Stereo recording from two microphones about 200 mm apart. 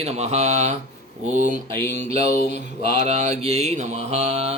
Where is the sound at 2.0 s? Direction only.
30° right (ahead or behind).